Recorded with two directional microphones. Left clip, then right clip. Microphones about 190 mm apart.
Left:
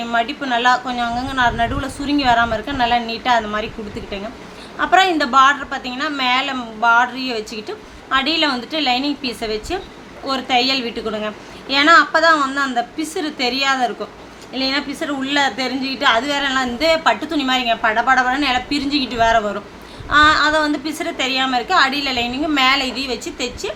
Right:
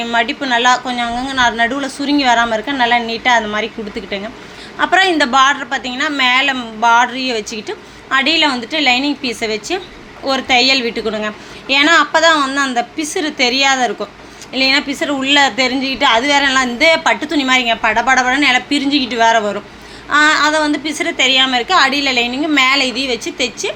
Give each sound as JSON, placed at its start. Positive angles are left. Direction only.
{"t": 0.0, "sound": "a woman's voice", "side_deg": -10}